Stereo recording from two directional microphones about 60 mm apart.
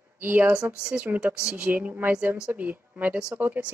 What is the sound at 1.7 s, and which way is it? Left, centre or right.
Speech, right.